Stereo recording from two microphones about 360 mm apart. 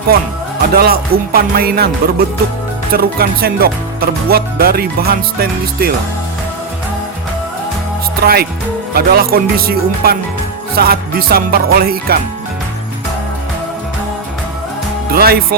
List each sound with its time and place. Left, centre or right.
0.7 s speech: right
8.2 s speech: right
15.1 s speech: right